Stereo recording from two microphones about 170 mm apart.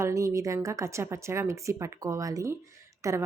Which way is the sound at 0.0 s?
20° right (ahead or behind).